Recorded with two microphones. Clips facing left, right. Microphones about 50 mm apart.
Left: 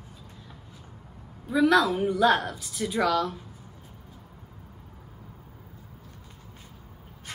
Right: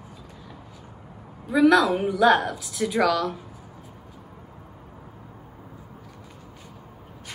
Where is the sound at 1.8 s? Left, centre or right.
Right.